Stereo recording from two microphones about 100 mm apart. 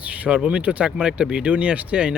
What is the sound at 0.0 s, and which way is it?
Speech, 15° right (ahead or behind).